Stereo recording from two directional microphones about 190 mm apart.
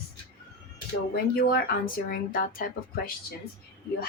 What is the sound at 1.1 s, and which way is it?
Speech, 55° left (ahead or behind).